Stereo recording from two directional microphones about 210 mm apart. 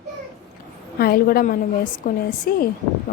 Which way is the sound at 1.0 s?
45° left (ahead or behind).